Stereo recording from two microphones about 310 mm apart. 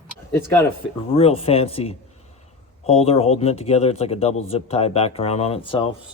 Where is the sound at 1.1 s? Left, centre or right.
Centre.